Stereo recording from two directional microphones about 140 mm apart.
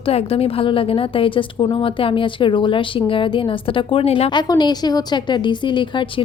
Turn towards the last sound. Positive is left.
turn(degrees=35)  # may be behind; listen again after turning